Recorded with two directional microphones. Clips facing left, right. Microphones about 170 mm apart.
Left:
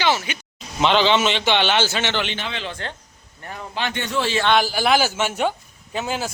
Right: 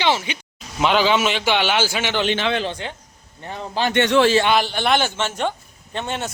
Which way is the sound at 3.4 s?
30° right (ahead or behind).